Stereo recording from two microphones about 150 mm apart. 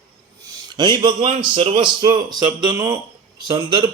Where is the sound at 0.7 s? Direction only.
30° right (ahead or behind).